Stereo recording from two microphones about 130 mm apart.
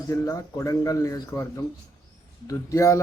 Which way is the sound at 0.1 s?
25° left (ahead or behind).